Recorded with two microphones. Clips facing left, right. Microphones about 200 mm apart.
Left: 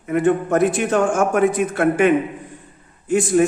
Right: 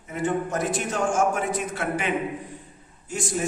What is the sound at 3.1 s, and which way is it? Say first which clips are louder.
Speech: left 13 dB; 60° left (ahead or behind).